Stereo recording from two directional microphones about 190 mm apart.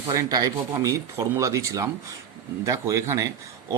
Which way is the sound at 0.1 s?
20° right (ahead or behind).